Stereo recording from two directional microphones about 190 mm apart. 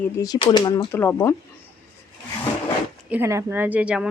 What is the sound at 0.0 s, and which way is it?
Speech, 20° left (ahead or behind).